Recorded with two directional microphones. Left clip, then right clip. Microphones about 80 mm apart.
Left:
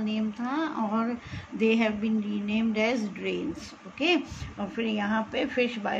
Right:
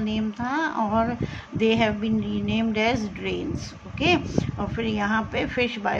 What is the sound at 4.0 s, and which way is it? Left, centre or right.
A woman's voice, right.